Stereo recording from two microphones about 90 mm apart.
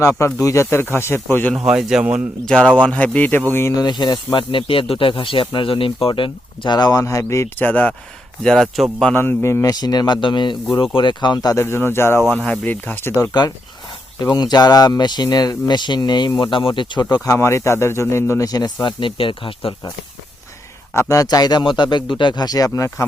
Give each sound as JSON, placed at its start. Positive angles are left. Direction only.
{"t": 0.3, "sound": "speech", "side_deg": 35}
{"t": 1.5, "sound": "a man's voice", "side_deg": -10}
{"t": 2.5, "sound": "speech", "side_deg": 10}
{"t": 3.8, "sound": "speech", "side_deg": 55}
{"t": 7.0, "sound": "speech", "side_deg": 35}
{"t": 7.6, "sound": "speech", "side_deg": 20}
{"t": 8.4, "sound": "speech", "side_deg": 5}
{"t": 9.1, "sound": "speech", "side_deg": 30}
{"t": 9.7, "sound": "speech", "side_deg": 50}
{"t": 11.6, "sound": "speech", "side_deg": 25}
{"t": 14.2, "sound": "speech", "side_deg": 50}
{"t": 17.2, "sound": "speech", "side_deg": 35}
{"t": 18.4, "sound": "speech", "side_deg": 50}
{"t": 20.9, "sound": "speech", "side_deg": 35}